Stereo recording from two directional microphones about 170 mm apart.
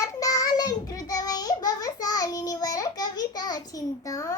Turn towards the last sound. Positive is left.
turn(degrees=20)  # may be behind; listen again after turning